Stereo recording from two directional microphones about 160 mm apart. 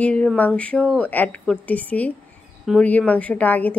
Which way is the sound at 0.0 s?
5° left (ahead or behind).